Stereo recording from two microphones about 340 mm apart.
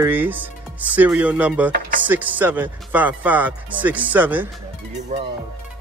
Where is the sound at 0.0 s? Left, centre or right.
Centre.